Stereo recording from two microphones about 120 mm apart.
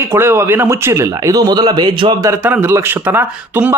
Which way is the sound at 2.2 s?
25° right (ahead or behind).